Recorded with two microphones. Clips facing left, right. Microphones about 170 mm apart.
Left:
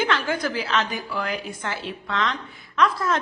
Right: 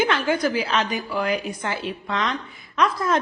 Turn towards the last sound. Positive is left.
turn(degrees=-10)  # may be behind; listen again after turning